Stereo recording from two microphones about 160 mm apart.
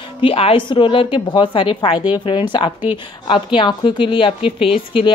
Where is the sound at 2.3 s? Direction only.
30° left (ahead or behind).